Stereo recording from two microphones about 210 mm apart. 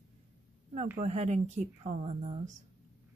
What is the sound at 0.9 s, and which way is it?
Speech, 35° right (ahead or behind).